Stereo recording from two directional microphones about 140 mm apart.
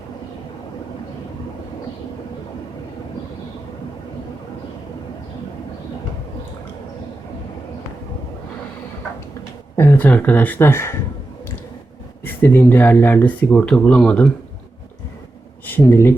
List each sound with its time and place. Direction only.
9.7 s speech: 15° left (ahead or behind)
12.2 s speech: 15° left (ahead or behind)
15.6 s speech: 15° left (ahead or behind)